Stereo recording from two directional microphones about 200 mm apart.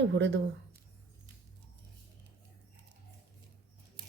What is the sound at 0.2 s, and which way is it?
Speech, 65° right (ahead or behind).